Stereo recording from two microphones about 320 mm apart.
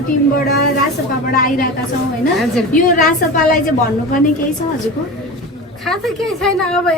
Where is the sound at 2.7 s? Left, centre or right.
Left.